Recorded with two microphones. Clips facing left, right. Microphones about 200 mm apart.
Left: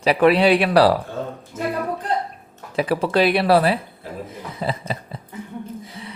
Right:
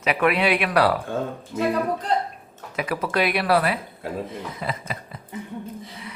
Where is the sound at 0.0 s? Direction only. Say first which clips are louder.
Left 6 dB; 30° left (ahead or behind).